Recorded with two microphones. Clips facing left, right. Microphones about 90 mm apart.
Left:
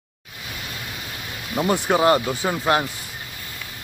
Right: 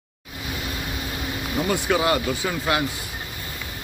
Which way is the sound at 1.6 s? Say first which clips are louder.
Left 3 dB; 30° left (ahead or behind).